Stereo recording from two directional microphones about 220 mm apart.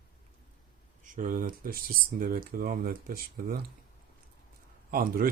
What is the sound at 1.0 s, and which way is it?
Speech, 35° right (ahead or behind).